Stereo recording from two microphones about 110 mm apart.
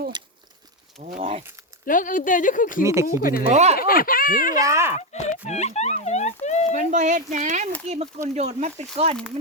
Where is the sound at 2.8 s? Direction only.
25° right (ahead or behind).